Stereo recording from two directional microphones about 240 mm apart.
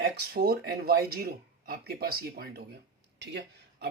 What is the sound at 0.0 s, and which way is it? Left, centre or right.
Speech, right.